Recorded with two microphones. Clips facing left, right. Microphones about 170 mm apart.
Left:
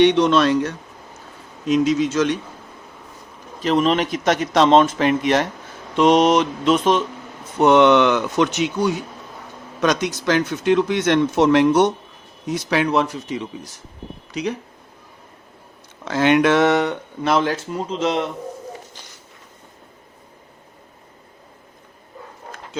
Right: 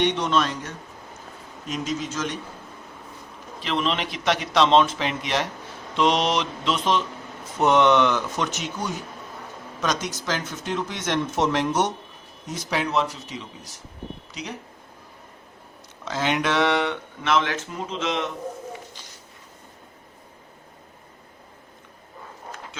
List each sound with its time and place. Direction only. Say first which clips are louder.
0.0 s speech: left 8 dB; 80° left
1.6 s a man's voice: left 11 dB; 90° left
3.6 s speech: left 8 dB; 45° left (ahead or behind)
7.6 s speech: left 5 dB; 65° left (ahead or behind)
16.0 s speech: left 9 dB; 60° left (ahead or behind); by 18.3 s 35° left (ahead or behind)